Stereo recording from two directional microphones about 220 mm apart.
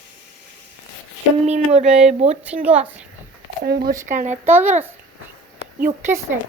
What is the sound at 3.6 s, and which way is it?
Speech, 45° right (ahead or behind).